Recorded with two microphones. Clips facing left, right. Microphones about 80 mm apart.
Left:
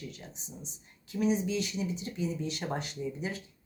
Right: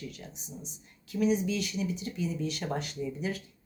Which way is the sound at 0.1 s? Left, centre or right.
Left.